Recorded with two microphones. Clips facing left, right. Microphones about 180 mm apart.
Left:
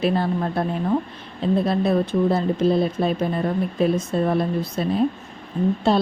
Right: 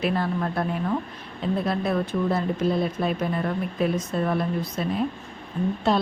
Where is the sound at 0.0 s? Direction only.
30° left (ahead or behind).